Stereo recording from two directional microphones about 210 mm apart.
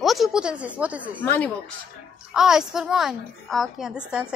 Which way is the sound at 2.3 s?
5° right (ahead or behind).